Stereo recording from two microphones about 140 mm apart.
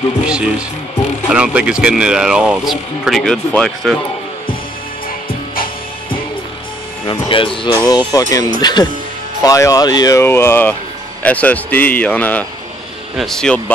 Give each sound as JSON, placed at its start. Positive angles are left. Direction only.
{"t": 0.3, "sound": "speech", "side_deg": -5}
{"t": 7.1, "sound": "speech", "side_deg": 40}
{"t": 10.2, "sound": "a man's voice", "side_deg": 15}